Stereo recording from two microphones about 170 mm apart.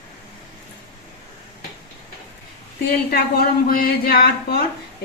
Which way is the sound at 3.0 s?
60° left (ahead or behind).